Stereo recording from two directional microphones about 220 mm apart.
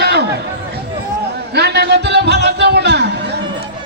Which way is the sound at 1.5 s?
50° right (ahead or behind).